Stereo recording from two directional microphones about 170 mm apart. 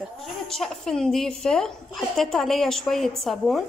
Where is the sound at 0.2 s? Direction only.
Centre (ahead or behind).